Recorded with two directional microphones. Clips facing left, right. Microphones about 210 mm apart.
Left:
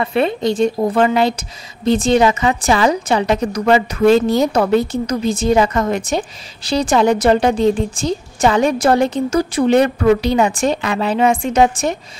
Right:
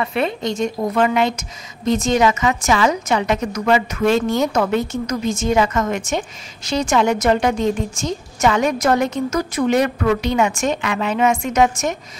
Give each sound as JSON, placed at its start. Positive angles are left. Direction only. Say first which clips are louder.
{"t": 0.0, "sound": "a woman's voice", "louder": "left 4 dB", "side_deg": 35}